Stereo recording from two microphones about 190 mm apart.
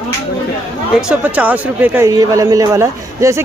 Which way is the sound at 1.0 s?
10° right (ahead or behind).